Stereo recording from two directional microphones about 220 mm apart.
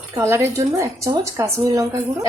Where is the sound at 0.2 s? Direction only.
10° right (ahead or behind).